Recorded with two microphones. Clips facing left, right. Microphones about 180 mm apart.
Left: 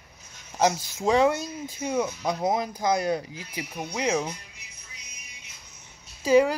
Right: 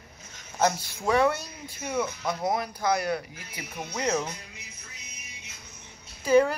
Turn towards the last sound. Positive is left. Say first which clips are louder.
# left 1 dB
turn(degrees=15)  # may be behind; listen again after turning